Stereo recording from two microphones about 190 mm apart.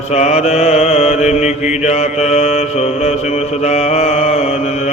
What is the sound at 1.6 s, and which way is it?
Mantra, 5° right (ahead or behind).